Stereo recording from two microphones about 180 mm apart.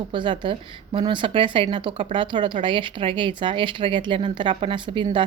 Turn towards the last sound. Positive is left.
turn(degrees=-25)  # may be behind; listen again after turning